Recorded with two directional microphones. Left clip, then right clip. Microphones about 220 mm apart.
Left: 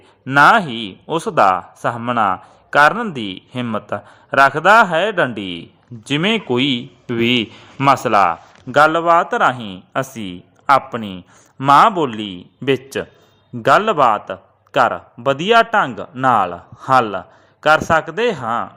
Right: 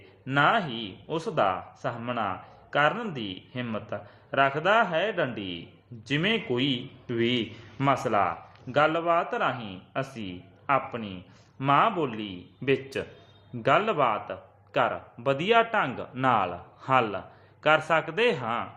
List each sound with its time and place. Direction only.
0.3 s a man's voice: 35° left (ahead or behind)